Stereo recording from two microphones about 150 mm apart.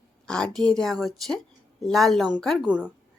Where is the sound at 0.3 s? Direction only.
5° left (ahead or behind).